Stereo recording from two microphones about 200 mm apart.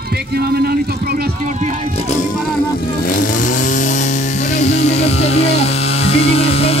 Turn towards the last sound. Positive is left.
turn(degrees=30)  # may be behind; listen again after turning